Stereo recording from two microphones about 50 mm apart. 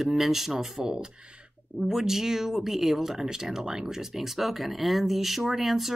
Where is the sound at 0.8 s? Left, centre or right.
Centre.